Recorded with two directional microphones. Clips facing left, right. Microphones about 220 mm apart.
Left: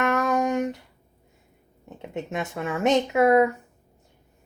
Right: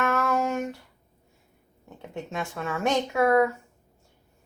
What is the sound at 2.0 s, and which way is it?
Speech, 20° left (ahead or behind).